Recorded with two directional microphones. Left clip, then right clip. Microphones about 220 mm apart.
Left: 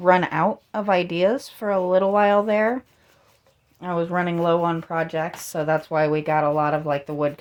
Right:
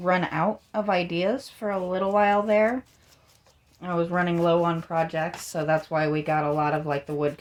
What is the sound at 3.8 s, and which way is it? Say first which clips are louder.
Speech: left 2 dB; 30° left (ahead or behind).